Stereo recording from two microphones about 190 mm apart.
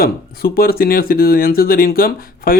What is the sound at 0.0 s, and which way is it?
A man's voice, 50° left (ahead or behind).